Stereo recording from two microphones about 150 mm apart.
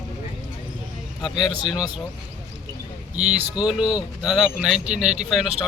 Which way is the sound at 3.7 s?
5° right (ahead or behind).